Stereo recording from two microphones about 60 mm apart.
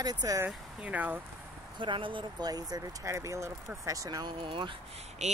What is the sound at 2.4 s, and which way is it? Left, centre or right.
Speech, right.